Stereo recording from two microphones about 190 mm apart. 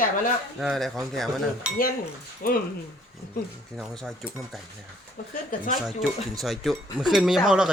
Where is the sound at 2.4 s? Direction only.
50° left (ahead or behind).